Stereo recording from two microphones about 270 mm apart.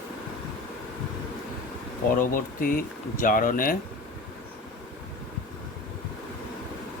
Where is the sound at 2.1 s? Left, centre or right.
Left.